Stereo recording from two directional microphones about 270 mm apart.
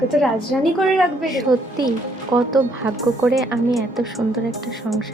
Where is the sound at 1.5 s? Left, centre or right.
Centre.